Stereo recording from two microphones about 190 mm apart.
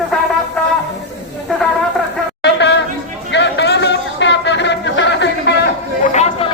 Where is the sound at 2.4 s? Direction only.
65° left (ahead or behind).